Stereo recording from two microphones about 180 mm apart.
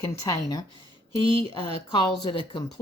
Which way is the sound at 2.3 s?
25° left (ahead or behind).